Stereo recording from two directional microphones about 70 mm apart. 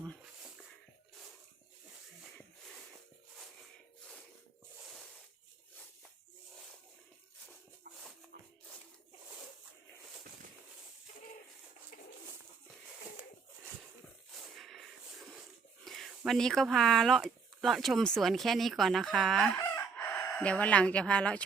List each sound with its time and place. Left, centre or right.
14.3 s a sound: centre
15.8 s speech: centre
19.5 s chicken: left
20.1 s speech: centre